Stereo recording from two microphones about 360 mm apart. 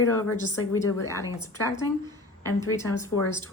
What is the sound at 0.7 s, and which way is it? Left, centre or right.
Speech, centre.